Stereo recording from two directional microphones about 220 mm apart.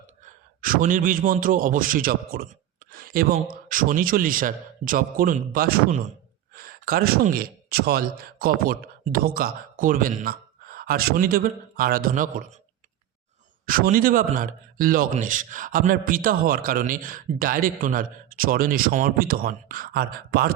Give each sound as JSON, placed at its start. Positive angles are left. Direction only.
{"t": 0.6, "sound": "a man's voice", "side_deg": -40}
{"t": 2.9, "sound": "a sound", "side_deg": -40}
{"t": 3.5, "sound": "a man's voice", "side_deg": -40}
{"t": 13.7, "sound": "a man's voice", "side_deg": -40}